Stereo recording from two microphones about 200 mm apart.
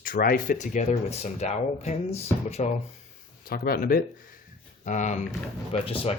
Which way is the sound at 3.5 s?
45° left (ahead or behind).